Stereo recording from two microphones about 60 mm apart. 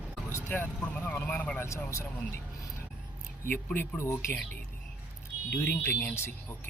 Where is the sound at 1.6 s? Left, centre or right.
Left.